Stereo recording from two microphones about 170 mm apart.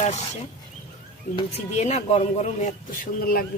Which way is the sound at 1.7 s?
40° left (ahead or behind).